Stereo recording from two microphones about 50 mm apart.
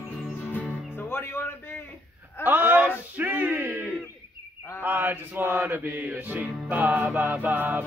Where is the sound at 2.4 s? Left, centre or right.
Right.